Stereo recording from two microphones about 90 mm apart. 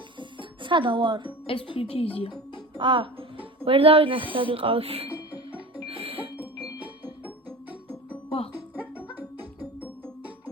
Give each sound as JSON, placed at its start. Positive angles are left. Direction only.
{"t": 0.2, "sound": "music", "side_deg": -65}
{"t": 1.5, "sound": "a woman's voice", "side_deg": 90}
{"t": 2.7, "sound": "speech", "side_deg": -65}
{"t": 5.9, "sound": "music", "side_deg": -90}
{"t": 6.3, "sound": "ding", "side_deg": -15}
{"t": 8.7, "sound": "music", "side_deg": -15}